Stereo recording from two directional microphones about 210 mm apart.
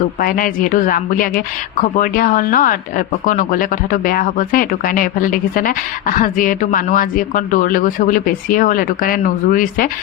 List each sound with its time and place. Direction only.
0.2 s speech: 40° left (ahead or behind)